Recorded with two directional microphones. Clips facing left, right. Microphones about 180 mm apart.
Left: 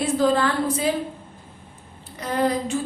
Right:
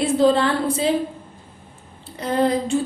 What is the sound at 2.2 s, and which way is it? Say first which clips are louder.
Speech: right 3 dB; 30° right (ahead or behind).